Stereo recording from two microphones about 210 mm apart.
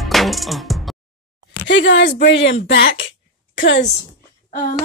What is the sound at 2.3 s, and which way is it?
A woman's voice, 60° left (ahead or behind).